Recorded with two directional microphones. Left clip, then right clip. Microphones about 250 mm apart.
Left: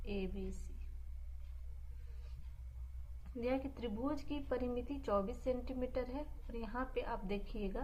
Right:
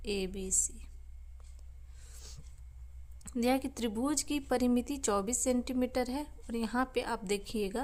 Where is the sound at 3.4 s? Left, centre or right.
Right.